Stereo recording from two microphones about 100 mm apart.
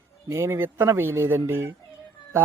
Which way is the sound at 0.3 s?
30° right (ahead or behind).